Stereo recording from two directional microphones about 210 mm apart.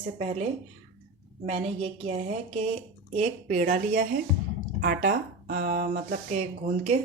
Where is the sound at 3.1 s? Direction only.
35° right (ahead or behind).